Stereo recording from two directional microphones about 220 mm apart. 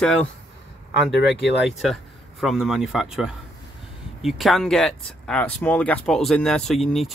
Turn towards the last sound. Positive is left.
turn(degrees=0)  # may be behind; listen again after turning